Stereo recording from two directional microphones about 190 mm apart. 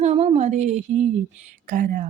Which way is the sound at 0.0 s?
35° right (ahead or behind).